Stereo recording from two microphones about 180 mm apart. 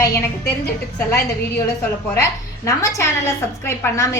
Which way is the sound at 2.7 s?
15° left (ahead or behind).